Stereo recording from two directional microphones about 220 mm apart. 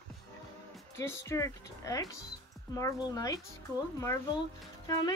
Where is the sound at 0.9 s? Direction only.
15° left (ahead or behind).